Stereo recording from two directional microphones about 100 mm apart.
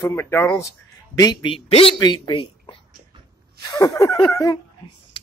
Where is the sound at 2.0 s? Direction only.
45° left (ahead or behind).